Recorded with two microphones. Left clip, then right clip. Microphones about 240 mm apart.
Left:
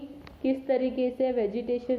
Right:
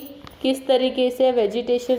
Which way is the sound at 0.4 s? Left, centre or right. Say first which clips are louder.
Right 7 dB; centre.